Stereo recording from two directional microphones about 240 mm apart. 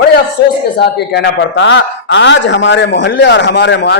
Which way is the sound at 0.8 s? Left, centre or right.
Left.